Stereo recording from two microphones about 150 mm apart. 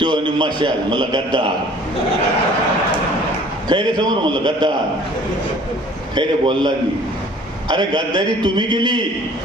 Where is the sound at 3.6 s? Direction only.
30° right (ahead or behind).